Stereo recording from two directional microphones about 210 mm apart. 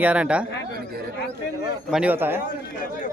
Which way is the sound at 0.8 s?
45° right (ahead or behind).